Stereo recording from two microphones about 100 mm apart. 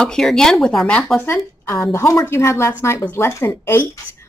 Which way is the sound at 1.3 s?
25° left (ahead or behind).